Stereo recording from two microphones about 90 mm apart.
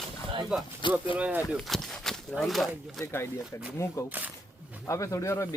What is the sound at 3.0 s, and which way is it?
Speech, 25° left (ahead or behind).